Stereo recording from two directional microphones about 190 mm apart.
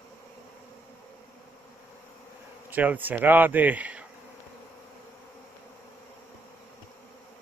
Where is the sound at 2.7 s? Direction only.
10° right (ahead or behind).